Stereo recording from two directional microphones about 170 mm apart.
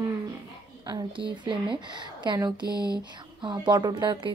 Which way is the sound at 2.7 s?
20° left (ahead or behind).